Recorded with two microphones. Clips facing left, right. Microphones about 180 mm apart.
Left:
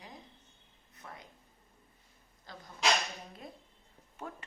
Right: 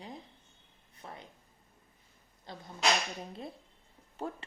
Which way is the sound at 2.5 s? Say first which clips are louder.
Right 4 dB; 25° right (ahead or behind).